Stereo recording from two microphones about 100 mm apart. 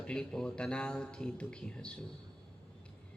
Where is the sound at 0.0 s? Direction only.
5° left (ahead or behind).